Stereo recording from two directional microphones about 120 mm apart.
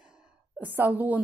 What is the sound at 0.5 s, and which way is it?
Speech, 15° right (ahead or behind).